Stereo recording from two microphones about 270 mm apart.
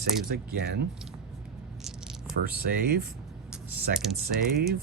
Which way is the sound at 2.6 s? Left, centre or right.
Right.